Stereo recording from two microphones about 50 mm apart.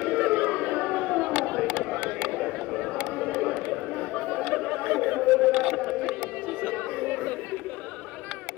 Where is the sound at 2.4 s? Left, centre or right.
Centre.